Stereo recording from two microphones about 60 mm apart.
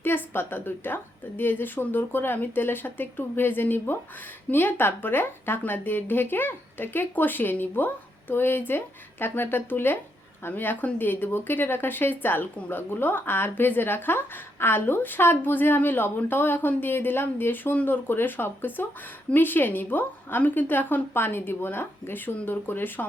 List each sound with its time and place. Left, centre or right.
0.0 s a woman's voice: left